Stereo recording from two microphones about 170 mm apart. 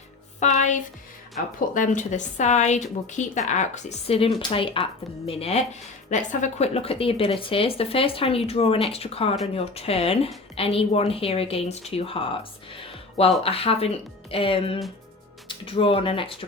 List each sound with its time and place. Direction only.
0.3 s a woman's voice: 45° left (ahead or behind)